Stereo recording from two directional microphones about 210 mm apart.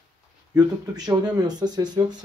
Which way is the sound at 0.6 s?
20° right (ahead or behind).